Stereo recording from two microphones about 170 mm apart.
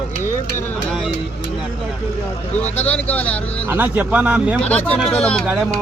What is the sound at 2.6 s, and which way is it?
Speech, 10° left (ahead or behind).